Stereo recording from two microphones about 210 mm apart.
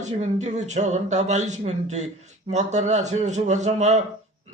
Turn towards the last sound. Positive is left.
turn(degrees=-30)  # may be behind; listen again after turning